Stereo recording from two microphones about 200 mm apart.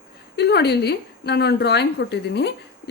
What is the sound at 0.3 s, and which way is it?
A woman's voice, 55° left (ahead or behind).